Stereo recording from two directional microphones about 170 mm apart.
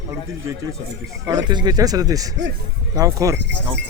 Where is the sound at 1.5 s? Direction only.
25° right (ahead or behind).